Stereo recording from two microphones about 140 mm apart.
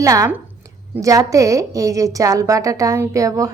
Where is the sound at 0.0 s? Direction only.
25° right (ahead or behind).